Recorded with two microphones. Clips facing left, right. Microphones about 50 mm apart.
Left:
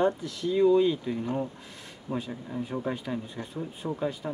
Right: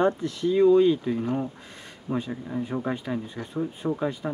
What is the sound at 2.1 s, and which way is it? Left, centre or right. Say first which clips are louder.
Speech: right 4 dB; right.